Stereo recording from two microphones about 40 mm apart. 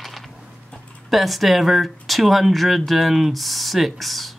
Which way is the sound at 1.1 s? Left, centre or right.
Centre.